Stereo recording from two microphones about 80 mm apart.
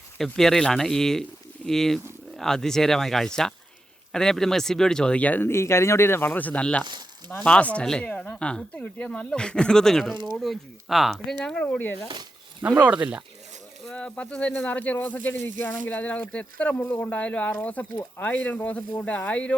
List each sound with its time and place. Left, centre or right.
0.2 s speech: centre
5.5 s speech: left; by 11.3 s centre
11.4 s speech: centre
12.8 s speech: centre
13.9 s speech: centre